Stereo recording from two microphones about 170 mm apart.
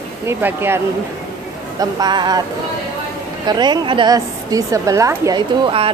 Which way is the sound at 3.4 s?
25° right (ahead or behind).